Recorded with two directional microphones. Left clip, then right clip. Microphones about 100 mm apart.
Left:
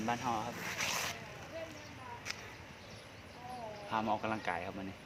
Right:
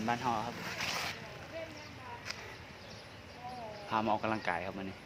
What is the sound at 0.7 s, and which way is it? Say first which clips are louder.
Vehicle: left 1 dB; 90° left.